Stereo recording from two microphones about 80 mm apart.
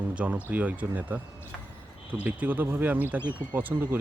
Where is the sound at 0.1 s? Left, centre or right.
Centre.